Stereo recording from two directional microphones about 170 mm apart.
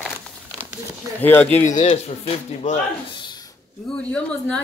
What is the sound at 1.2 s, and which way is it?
Speech, 10° left (ahead or behind).